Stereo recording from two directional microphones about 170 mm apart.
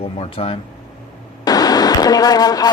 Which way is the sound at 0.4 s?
35° left (ahead or behind).